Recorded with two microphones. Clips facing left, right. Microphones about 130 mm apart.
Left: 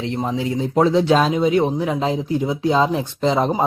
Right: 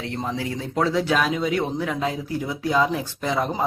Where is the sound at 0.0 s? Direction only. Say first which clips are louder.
Left 5 dB; 20° left (ahead or behind).